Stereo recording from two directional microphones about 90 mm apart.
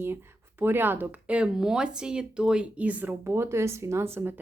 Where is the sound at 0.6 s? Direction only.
25° right (ahead or behind).